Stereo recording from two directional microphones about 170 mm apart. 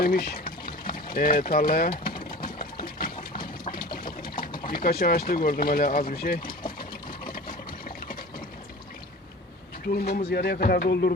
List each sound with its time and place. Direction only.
0.0 s pour: 65° left (ahead or behind)
2.8 s water: 60° left (ahead or behind)
4.6 s speech: 60° left (ahead or behind)
6.5 s a sound: 25° left (ahead or behind)
7.3 s water: 60° left (ahead or behind)
9.8 s speech: 65° left (ahead or behind)